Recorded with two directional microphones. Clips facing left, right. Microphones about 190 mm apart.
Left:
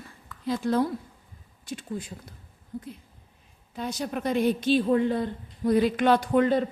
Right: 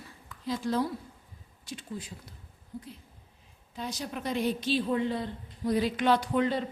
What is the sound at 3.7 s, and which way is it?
A woman's voice, 55° left (ahead or behind).